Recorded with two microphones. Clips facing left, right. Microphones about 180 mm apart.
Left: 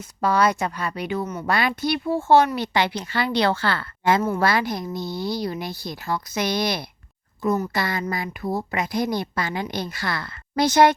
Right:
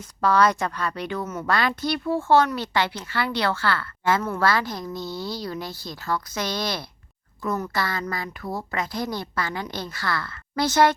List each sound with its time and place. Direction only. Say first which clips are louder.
0.2 s a woman's voice: even; 10° left (ahead or behind)